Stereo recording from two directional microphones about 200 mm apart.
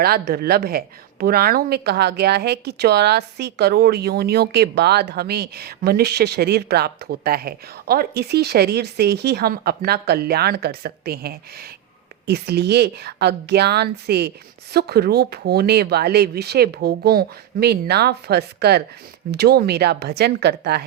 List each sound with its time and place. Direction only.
0.0 s speech: 50° right (ahead or behind)